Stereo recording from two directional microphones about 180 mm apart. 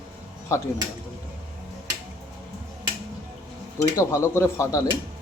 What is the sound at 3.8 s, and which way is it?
Speech, 15° left (ahead or behind).